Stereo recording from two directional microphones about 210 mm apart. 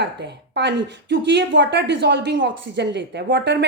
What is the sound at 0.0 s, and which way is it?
A woman's voice, 55° right (ahead or behind).